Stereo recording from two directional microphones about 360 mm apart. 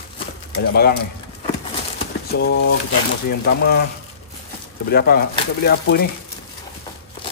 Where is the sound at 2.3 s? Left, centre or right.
Left.